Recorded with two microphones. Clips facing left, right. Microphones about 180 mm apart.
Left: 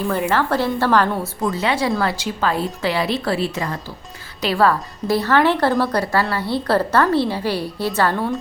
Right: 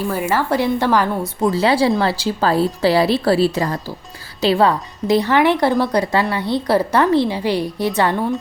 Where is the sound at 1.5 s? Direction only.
30° right (ahead or behind).